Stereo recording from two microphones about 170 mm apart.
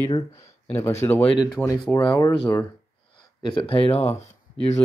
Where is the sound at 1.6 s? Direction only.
10° left (ahead or behind).